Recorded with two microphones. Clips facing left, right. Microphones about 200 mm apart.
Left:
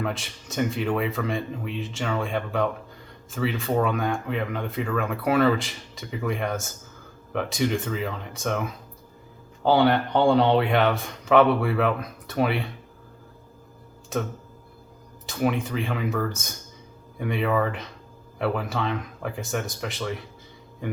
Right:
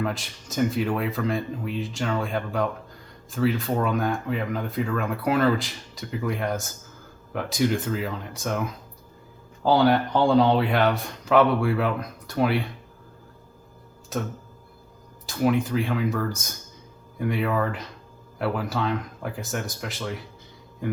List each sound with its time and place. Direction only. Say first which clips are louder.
0.0 s speech: right 1 dB; centre (ahead or behind)
9.6 s speech: even; centre (ahead or behind)
15.3 s speech: right 3 dB; centre (ahead or behind)